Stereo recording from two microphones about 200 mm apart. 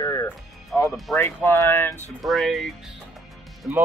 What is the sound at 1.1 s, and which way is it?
Speech, 10° left (ahead or behind).